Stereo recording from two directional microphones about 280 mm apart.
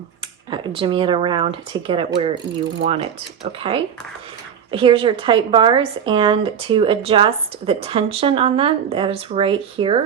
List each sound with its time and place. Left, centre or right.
0.5 s a woman's voice: centre